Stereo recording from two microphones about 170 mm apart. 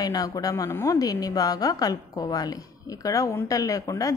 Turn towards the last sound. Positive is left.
turn(degrees=20)  # may be behind; listen again after turning